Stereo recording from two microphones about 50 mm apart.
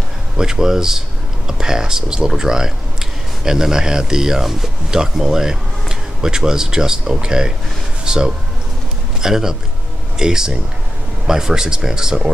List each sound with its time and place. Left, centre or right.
0.4 s speech: centre